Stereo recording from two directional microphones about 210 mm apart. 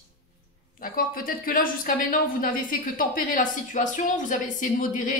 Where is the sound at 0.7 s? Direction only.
40° left (ahead or behind).